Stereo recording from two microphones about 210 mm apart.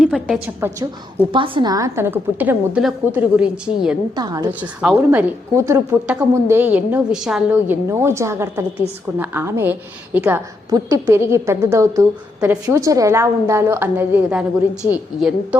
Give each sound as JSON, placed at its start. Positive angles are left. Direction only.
{"t": 0.0, "sound": "a woman's voice", "side_deg": 0}
{"t": 1.3, "sound": "a woman's voice", "side_deg": -25}
{"t": 4.1, "sound": "a woman's voice", "side_deg": -20}
{"t": 4.8, "sound": "a woman's voice", "side_deg": -5}